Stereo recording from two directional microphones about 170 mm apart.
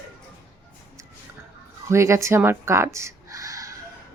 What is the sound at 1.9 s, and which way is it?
Speech, 15° right (ahead or behind).